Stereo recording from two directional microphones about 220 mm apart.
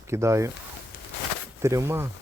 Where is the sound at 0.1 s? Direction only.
15° right (ahead or behind).